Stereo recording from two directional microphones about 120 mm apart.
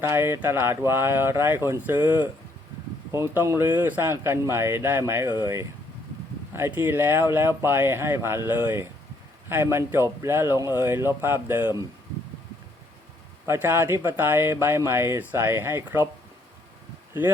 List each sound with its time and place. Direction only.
0.0 s speech: 20° right (ahead or behind)
6.5 s speech: 20° right (ahead or behind)
13.5 s speech: 20° right (ahead or behind)